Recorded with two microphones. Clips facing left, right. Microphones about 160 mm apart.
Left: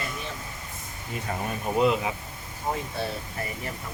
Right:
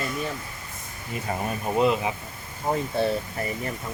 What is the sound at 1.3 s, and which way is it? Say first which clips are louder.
Speech: right 2 dB; 10° right (ahead or behind).